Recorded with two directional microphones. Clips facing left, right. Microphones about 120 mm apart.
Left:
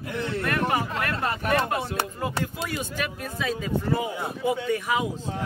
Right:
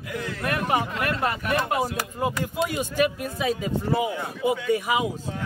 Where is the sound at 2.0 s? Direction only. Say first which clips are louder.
Left 3 dB; 30° left (ahead or behind).